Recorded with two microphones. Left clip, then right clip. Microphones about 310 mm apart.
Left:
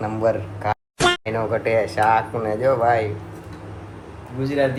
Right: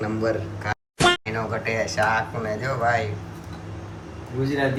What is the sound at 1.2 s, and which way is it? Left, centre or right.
Speech, centre.